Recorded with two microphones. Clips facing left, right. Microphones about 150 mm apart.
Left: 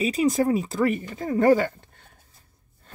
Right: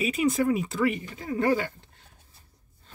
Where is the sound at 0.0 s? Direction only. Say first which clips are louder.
Left 3 dB; 35° left (ahead or behind).